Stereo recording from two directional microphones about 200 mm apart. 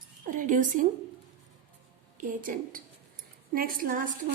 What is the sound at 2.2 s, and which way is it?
A woman's voice, 45° right (ahead or behind).